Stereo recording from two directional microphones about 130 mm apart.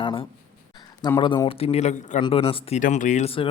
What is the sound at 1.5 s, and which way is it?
Speech, 45° left (ahead or behind).